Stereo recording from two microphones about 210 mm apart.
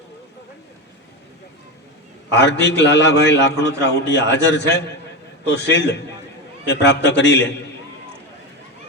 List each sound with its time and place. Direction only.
2.3 s a man's voice: 55° left (ahead or behind)